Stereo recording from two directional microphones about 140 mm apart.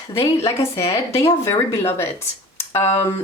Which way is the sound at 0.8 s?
45° left (ahead or behind).